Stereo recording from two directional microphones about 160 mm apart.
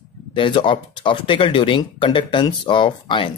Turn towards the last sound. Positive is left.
turn(degrees=30)  # may be behind; listen again after turning